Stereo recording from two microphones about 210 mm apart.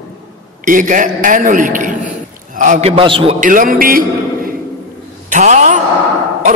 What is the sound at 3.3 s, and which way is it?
Speech, 40° right (ahead or behind).